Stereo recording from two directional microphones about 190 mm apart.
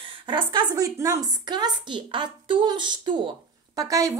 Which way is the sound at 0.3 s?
25° right (ahead or behind).